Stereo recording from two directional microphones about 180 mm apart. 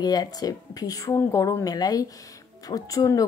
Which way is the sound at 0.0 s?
20° left (ahead or behind).